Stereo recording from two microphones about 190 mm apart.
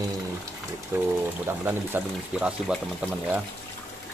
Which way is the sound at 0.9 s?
10° right (ahead or behind).